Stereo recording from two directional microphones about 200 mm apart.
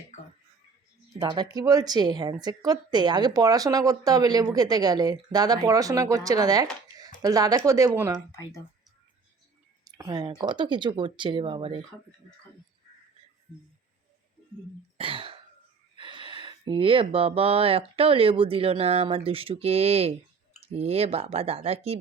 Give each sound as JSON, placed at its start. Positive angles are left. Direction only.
{"t": 1.2, "sound": "speech", "side_deg": -20}
{"t": 9.8, "sound": "speech", "side_deg": -20}
{"t": 14.9, "sound": "throat clearing", "side_deg": -25}
{"t": 16.0, "sound": "speech", "side_deg": -25}